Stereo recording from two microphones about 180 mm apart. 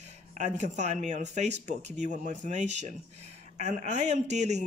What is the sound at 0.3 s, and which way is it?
Speech, 40° right (ahead or behind).